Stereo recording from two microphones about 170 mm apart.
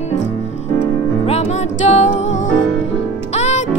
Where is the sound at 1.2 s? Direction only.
40° left (ahead or behind).